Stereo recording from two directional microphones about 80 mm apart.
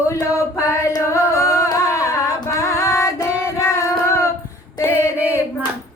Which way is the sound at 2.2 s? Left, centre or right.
Left.